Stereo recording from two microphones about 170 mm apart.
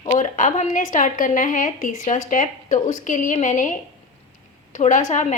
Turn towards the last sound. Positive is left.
turn(degrees=45)  # may be behind; listen again after turning